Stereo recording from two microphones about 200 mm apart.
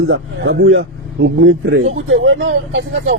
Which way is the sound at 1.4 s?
90° right.